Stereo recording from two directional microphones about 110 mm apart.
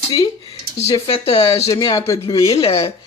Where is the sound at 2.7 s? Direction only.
60° left (ahead or behind).